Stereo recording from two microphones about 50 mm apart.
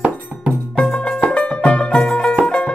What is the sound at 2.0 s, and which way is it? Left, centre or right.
Music, centre.